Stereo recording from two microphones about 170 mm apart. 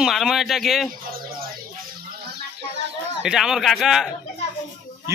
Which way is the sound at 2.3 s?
90° right.